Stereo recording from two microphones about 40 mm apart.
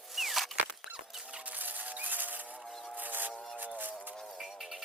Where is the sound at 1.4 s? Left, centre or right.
Right.